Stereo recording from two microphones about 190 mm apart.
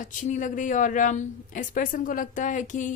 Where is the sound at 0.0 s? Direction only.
40° left (ahead or behind).